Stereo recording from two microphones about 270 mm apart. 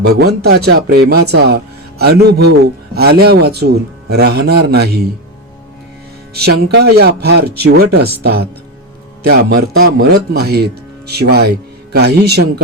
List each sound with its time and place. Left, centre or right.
0.0 s speech: right
6.3 s speech: right